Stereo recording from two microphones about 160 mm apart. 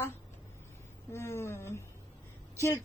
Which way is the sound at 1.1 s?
15° left (ahead or behind).